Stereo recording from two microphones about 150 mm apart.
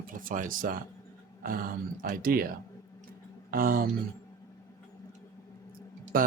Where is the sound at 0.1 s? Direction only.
65° right (ahead or behind).